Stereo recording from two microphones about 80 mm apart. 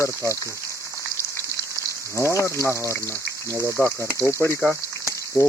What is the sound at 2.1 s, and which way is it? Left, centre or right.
Speech, left.